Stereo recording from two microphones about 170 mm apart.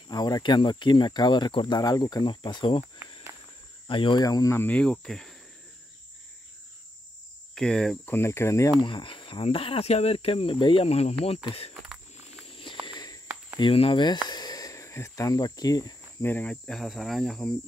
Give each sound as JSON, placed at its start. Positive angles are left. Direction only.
{"t": 0.1, "sound": "speech", "side_deg": 25}
{"t": 3.8, "sound": "cricket", "side_deg": 30}
{"t": 7.5, "sound": "cricket", "side_deg": 5}
{"t": 8.8, "sound": "speech", "side_deg": 30}
{"t": 12.4, "sound": "walk", "side_deg": 30}
{"t": 13.6, "sound": "speech", "side_deg": 30}